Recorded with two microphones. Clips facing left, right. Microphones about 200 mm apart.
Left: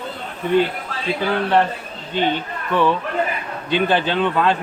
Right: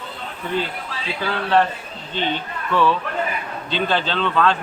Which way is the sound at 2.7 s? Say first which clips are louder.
Left 1 dB; 15° left (ahead or behind).